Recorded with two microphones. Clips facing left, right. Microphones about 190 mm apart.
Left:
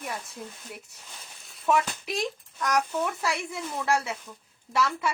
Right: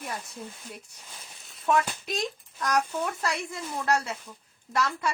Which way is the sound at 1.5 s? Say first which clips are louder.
Even; centre (ahead or behind).